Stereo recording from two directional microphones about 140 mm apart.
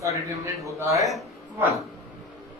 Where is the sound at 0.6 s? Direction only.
20° right (ahead or behind).